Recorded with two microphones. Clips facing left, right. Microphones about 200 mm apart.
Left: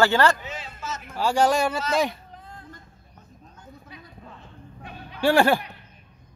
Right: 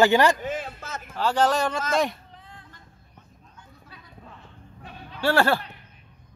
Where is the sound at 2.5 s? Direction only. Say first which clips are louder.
Left 8 dB; 40° left (ahead or behind).